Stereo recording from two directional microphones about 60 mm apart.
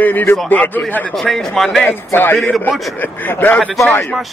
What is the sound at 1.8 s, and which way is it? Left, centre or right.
A man's voice, left.